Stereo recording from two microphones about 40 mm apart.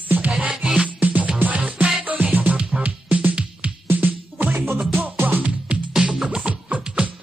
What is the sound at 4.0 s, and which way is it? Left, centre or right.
Music, right.